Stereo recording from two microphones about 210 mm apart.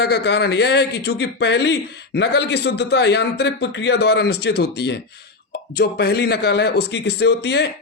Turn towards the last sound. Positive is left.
turn(degrees=55)  # may be behind; listen again after turning